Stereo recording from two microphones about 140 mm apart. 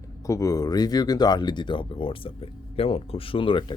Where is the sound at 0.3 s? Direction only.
25° left (ahead or behind).